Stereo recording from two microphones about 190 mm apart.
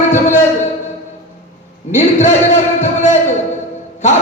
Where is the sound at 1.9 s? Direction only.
35° left (ahead or behind).